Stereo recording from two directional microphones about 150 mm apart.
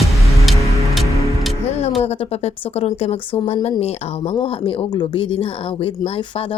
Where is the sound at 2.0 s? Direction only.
40° left (ahead or behind).